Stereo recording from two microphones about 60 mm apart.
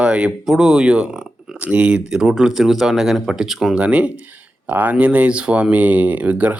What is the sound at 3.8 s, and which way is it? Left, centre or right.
Speech, centre.